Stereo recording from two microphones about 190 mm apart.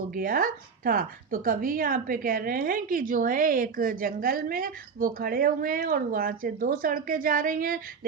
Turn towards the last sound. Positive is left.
turn(degrees=-45)  # may be behind; listen again after turning